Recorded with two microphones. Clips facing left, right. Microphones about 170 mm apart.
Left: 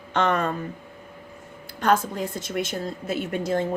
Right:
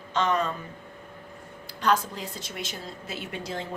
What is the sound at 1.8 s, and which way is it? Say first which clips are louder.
A woman's voice: left 4 dB; 50° left (ahead or behind).